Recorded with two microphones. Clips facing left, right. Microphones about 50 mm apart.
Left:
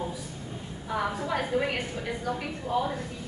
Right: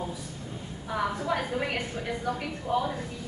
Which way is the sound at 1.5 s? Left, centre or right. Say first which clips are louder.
Left 3 dB; centre.